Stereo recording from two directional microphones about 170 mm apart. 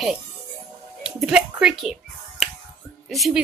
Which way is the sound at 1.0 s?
5° right (ahead or behind).